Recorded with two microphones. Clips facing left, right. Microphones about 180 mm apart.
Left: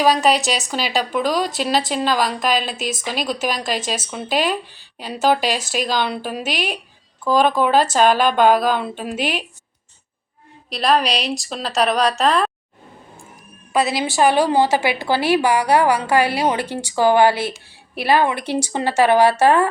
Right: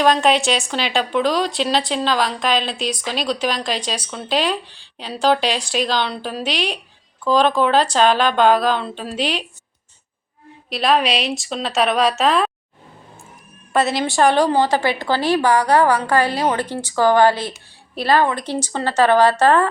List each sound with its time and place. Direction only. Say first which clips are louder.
0.0 s a woman's voice: right 1 dB; 5° left (ahead or behind)
2.7 s a woman's voice: right 1 dB; 45° left (ahead or behind)
3.2 s a woman's voice: right 2 dB; 5° left (ahead or behind)
10.7 s speech: even; centre (ahead or behind)
13.7 s a woman's voice: right 1 dB; centre (ahead or behind)